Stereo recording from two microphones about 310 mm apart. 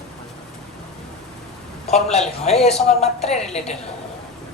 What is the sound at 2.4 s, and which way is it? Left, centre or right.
Speech, centre.